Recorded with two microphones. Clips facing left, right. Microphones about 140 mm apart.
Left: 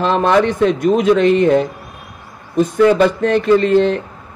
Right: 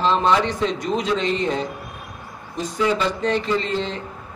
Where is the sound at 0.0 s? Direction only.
55° left (ahead or behind).